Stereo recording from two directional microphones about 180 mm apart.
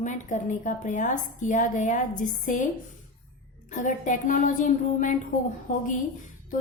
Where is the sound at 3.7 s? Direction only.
45° left (ahead or behind).